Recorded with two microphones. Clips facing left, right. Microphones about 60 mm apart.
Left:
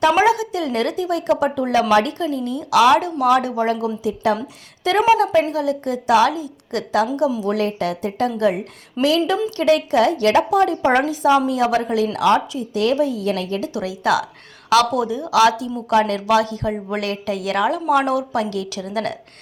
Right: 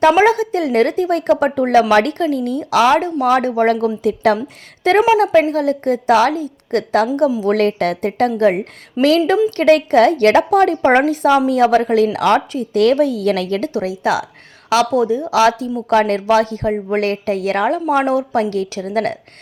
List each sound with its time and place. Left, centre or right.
0.2 s a woman's voice: right
2.6 s a woman's voice: right
4.8 s a woman's voice: right
7.4 s a woman's voice: right
13.7 s a woman's voice: right